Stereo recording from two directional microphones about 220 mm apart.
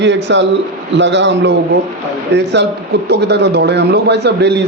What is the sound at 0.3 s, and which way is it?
A man's voice, 55° right (ahead or behind).